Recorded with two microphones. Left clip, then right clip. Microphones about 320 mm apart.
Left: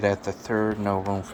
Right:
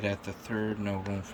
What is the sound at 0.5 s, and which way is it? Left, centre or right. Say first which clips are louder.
Speech: left 9 dB; left.